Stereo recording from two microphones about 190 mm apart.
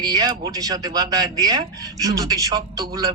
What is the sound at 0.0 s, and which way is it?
Speech, 20° right (ahead or behind).